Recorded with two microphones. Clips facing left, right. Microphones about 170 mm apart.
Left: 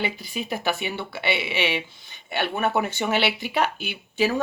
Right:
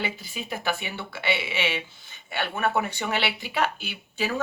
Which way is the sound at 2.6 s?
20° left (ahead or behind).